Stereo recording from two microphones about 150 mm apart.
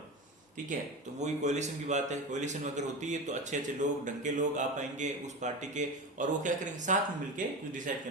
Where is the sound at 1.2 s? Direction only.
50° right (ahead or behind).